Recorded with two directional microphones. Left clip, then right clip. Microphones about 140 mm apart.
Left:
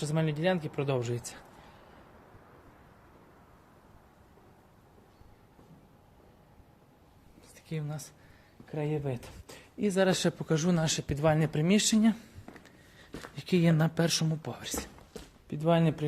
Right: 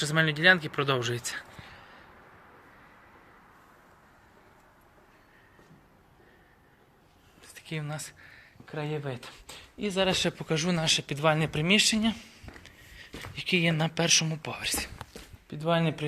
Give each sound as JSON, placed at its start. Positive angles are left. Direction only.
{"t": 0.0, "sound": "speech", "side_deg": 5}
{"t": 7.7, "sound": "speech", "side_deg": 5}
{"t": 8.7, "sound": "speech", "side_deg": 35}
{"t": 9.0, "sound": "speech", "side_deg": 50}
{"t": 10.2, "sound": "speech", "side_deg": 30}
{"t": 13.3, "sound": "speech", "side_deg": 55}
{"t": 14.4, "sound": "speech", "side_deg": 25}
{"t": 15.4, "sound": "speech", "side_deg": 50}